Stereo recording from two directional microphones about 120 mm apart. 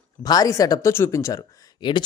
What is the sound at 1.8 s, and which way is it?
Speech, 40° left (ahead or behind).